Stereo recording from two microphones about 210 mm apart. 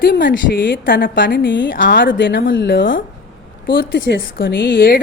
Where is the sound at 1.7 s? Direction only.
40° left (ahead or behind).